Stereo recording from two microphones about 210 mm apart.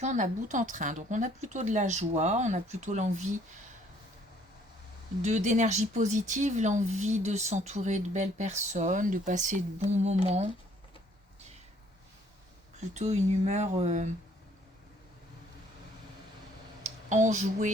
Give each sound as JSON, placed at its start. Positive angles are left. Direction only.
{"t": 0.0, "sound": "speech", "side_deg": -35}
{"t": 5.2, "sound": "speech", "side_deg": -35}
{"t": 12.9, "sound": "speech", "side_deg": -35}
{"t": 16.8, "sound": "speech", "side_deg": -35}